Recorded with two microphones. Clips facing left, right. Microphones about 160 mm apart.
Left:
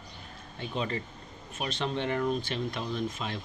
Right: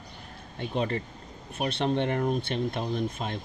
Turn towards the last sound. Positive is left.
turn(degrees=-50)  # may be behind; listen again after turning